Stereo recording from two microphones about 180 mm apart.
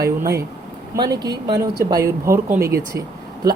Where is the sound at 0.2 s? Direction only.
15° right (ahead or behind).